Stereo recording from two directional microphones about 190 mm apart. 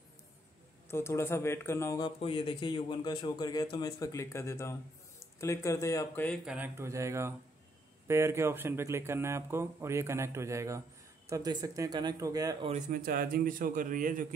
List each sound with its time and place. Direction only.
0.8 s speech: 15° left (ahead or behind)
6.4 s a man's voice: 5° right (ahead or behind)
12.6 s a man's voice: 40° right (ahead or behind)